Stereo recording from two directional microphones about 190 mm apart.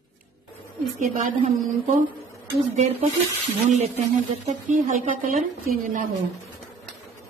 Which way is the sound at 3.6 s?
40° right (ahead or behind).